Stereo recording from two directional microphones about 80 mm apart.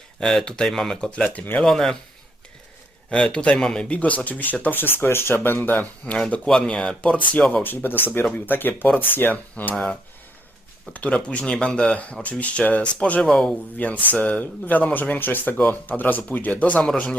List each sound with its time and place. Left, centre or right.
0.2 s speech: centre
1.6 s speech: centre
3.1 s speech: centre
6.1 s speech: centre
13.2 s speech: centre
13.5 s speech: centre